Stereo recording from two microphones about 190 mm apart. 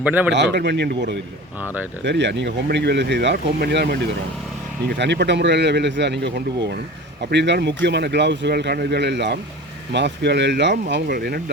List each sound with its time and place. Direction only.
0.0 s a man's voice: 10° right (ahead or behind)
0.3 s speech: 65° right (ahead or behind)
1.6 s a man's voice: 10° right (ahead or behind)
2.0 s speech: 65° right (ahead or behind)